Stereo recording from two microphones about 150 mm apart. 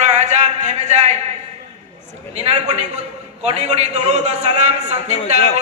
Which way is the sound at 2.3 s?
40° right (ahead or behind).